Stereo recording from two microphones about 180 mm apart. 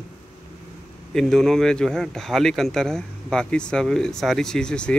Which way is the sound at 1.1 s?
Centre (ahead or behind).